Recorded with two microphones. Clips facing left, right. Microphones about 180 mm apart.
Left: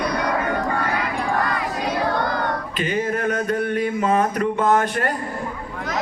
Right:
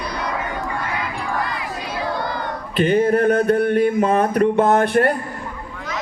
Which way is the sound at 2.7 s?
60° right (ahead or behind).